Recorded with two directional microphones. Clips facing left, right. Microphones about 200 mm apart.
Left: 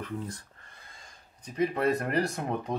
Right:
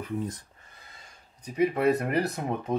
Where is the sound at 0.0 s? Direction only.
15° right (ahead or behind).